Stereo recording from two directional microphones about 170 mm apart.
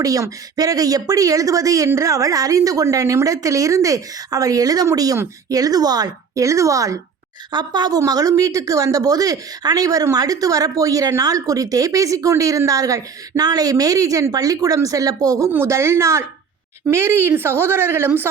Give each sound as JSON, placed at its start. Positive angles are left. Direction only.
{"t": 0.0, "sound": "a woman's voice", "side_deg": -20}